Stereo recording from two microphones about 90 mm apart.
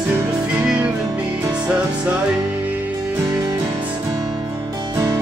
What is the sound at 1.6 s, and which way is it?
Music, 15° right (ahead or behind).